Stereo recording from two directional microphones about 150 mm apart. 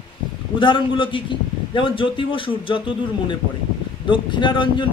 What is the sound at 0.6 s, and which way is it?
Speech, 35° left (ahead or behind).